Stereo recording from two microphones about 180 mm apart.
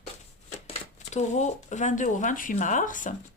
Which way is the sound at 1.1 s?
40° left (ahead or behind).